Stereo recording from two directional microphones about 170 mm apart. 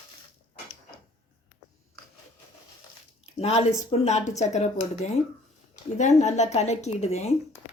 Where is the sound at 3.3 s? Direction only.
35° left (ahead or behind).